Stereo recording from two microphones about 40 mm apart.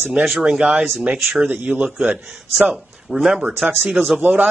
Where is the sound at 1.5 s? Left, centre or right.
Right.